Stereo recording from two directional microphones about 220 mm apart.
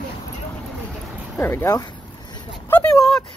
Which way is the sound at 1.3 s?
10° left (ahead or behind).